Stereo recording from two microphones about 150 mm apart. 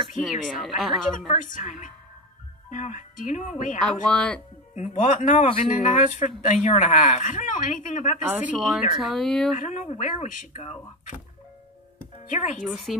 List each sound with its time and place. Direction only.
0.2 s a woman's voice: centre (ahead or behind)
1.3 s a woman's voice: 55° left (ahead or behind)
4.1 s speech: 10° left (ahead or behind)
4.7 s speech: 55° left (ahead or behind)
8.2 s a woman's voice: 10° right (ahead or behind)
9.6 s speech: 50° left (ahead or behind)
12.3 s speech: 50° left (ahead or behind)